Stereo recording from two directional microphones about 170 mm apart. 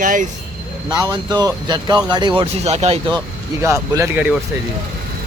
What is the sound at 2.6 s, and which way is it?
Speech, 40° right (ahead or behind).